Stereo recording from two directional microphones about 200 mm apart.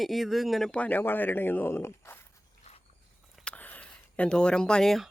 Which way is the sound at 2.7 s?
30° left (ahead or behind).